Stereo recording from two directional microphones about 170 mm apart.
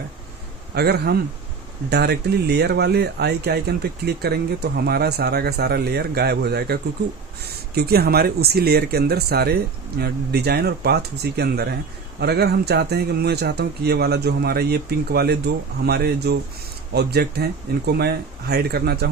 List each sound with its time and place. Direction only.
0.7 s speech: 70° right (ahead or behind)